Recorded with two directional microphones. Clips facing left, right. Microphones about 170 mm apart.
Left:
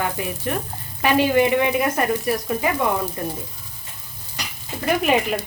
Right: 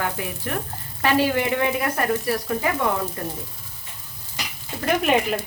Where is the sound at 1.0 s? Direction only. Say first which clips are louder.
Left 3 dB; 20° left (ahead or behind).